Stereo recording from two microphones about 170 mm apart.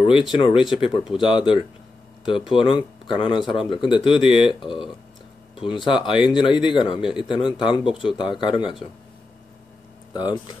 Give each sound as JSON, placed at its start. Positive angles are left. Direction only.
{"t": 0.0, "sound": "speech", "side_deg": 30}
{"t": 5.6, "sound": "speech", "side_deg": 30}
{"t": 10.1, "sound": "speech", "side_deg": 25}